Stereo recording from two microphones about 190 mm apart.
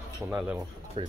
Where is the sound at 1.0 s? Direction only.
30° right (ahead or behind).